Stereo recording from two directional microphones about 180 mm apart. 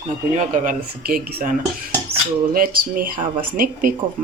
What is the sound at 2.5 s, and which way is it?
Speech, 50° right (ahead or behind).